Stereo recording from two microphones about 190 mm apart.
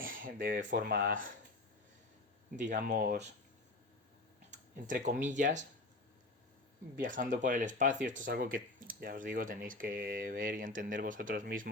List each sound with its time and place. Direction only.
0.3 s speech: 45° right (ahead or behind)
2.6 s speech: 40° right (ahead or behind)
4.5 s speech: 40° right (ahead or behind)
7.0 s speech: 45° right (ahead or behind)